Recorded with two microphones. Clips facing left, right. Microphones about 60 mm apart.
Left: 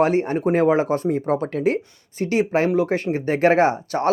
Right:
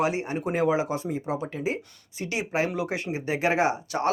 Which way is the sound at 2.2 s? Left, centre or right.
Left.